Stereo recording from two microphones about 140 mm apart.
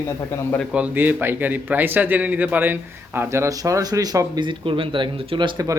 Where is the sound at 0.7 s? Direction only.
10° right (ahead or behind); by 5.7 s 35° right (ahead or behind).